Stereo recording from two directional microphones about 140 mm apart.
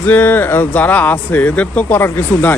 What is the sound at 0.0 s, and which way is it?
Speech, 10° left (ahead or behind).